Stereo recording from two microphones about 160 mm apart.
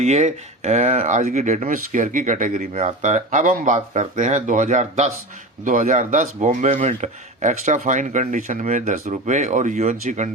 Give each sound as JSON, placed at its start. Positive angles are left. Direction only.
{"t": 0.0, "sound": "speech", "side_deg": -45}